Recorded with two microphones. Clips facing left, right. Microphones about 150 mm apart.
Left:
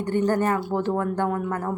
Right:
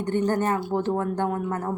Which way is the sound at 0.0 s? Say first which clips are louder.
Left 1 dB; 20° right (ahead or behind).